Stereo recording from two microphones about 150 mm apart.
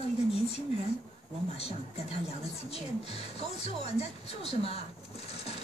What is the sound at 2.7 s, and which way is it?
Speech, 40° left (ahead or behind).